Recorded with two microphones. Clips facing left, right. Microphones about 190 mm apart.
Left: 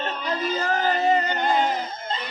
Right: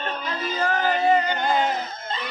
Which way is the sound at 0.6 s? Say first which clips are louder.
Right 3 dB; 35° left (ahead or behind).